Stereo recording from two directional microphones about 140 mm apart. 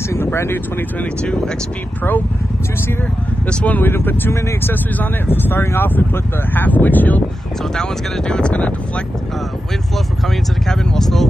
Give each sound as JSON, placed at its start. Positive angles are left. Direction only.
{"t": 0.1, "sound": "speech", "side_deg": 20}
{"t": 3.4, "sound": "speech", "side_deg": 10}